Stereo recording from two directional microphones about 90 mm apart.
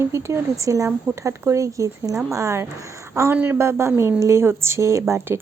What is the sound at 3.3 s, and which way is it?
A woman's voice, 20° right (ahead or behind).